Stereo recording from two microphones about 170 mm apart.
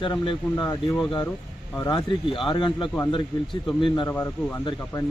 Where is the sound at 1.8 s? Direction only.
25° left (ahead or behind).